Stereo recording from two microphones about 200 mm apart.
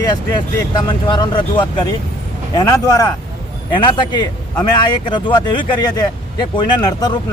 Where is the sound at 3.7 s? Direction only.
25° left (ahead or behind).